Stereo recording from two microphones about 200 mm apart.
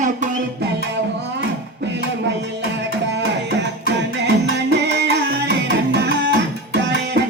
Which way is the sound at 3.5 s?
60° right (ahead or behind).